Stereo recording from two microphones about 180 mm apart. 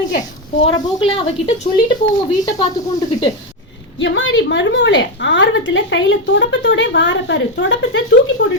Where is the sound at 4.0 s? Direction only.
90° left.